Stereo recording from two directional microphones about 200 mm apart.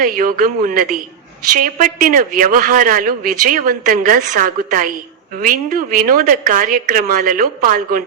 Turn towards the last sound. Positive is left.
turn(degrees=-45)  # may be behind; listen again after turning